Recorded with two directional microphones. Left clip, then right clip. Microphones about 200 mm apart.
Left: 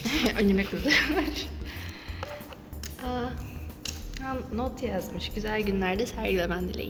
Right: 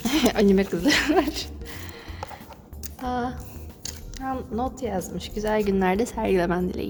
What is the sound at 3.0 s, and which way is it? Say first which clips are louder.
Music: right 5 dB; 65° right (ahead or behind).